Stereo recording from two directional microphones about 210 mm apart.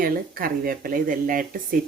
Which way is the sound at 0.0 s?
45° right (ahead or behind).